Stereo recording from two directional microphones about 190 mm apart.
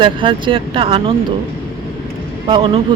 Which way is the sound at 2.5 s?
25° right (ahead or behind).